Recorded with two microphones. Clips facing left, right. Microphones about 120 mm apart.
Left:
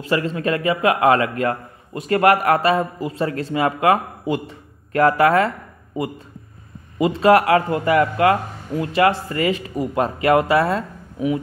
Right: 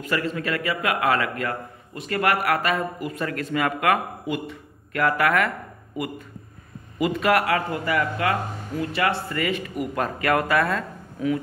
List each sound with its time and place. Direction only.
0.0 s a man's voice: 30° left (ahead or behind)